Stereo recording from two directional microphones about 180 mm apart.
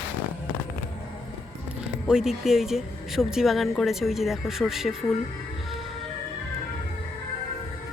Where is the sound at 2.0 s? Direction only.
5° right (ahead or behind).